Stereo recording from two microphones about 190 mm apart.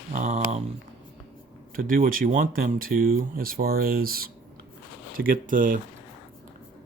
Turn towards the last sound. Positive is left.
turn(degrees=-45)  # may be behind; listen again after turning